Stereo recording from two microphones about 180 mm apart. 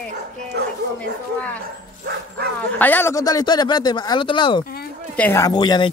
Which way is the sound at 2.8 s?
10° left (ahead or behind).